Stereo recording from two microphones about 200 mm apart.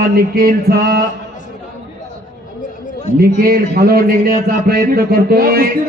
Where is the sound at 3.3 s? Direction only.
50° right (ahead or behind).